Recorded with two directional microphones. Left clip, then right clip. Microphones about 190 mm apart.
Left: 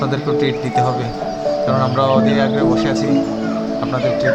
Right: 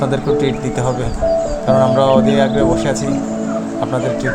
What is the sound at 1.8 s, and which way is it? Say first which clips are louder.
Speech: right 7 dB; 15° right (ahead or behind).